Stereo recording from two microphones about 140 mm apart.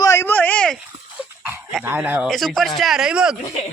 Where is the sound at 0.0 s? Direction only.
20° left (ahead or behind).